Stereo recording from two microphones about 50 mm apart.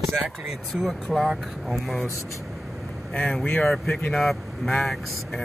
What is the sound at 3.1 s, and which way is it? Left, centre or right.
Speech, left.